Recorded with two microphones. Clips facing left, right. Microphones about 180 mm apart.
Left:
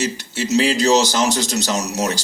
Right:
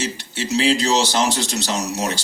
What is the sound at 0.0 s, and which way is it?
Speech, 40° left (ahead or behind).